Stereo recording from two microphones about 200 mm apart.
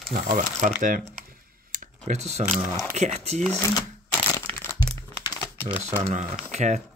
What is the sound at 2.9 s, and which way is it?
Speech, 35° right (ahead or behind).